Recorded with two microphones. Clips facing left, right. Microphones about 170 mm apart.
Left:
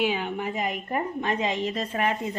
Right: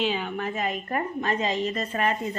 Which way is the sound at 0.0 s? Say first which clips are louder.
Left 1 dB; 15° left (ahead or behind).